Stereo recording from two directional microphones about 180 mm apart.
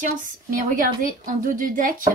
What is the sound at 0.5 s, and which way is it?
A woman's voice, 50° right (ahead or behind).